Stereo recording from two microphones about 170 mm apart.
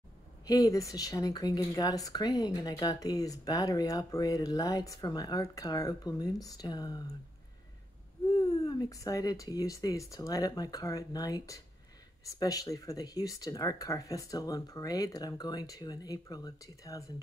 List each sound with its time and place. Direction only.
0.5 s speech: 20° left (ahead or behind)
8.4 s speech: 25° left (ahead or behind)